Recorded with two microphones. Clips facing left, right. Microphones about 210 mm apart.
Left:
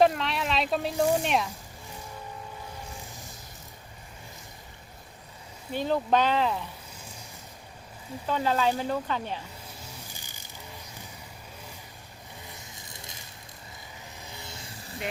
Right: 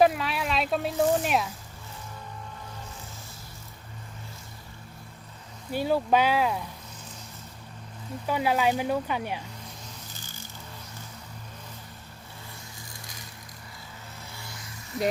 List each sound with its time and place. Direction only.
0.0 s speech: 5° right (ahead or behind)
5.7 s speech: 10° right (ahead or behind)
8.3 s speech: 10° right (ahead or behind)
9.8 s music: 10° left (ahead or behind)
14.2 s vehicle: 20° left (ahead or behind)